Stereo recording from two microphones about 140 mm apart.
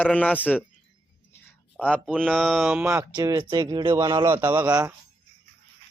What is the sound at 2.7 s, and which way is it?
A man's voice, 15° right (ahead or behind).